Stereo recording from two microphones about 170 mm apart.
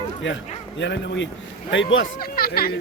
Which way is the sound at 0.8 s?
90° left.